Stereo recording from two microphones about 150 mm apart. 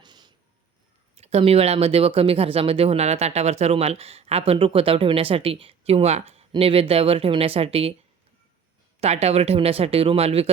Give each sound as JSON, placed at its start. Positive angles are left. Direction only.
{"t": 0.0, "sound": "a sound", "side_deg": -30}
{"t": 1.1, "sound": "speech", "side_deg": -45}
{"t": 9.0, "sound": "speech", "side_deg": -45}